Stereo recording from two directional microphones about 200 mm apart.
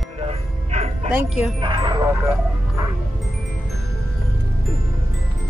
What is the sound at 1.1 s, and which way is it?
Speech, 5° right (ahead or behind).